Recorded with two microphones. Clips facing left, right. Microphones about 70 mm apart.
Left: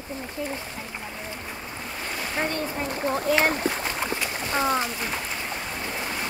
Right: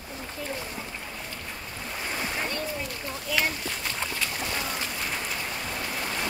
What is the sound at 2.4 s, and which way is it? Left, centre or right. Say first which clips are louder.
Speech: left 4 dB; left.